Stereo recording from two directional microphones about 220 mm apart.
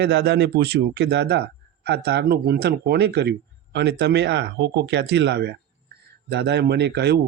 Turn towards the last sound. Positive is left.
turn(degrees=-50)  # may be behind; listen again after turning